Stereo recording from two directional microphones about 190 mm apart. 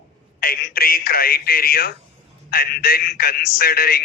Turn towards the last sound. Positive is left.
turn(degrees=55)  # may be behind; listen again after turning